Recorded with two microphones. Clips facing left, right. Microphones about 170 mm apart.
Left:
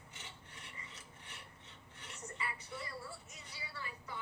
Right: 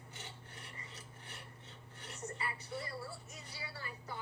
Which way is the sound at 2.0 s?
35° right (ahead or behind).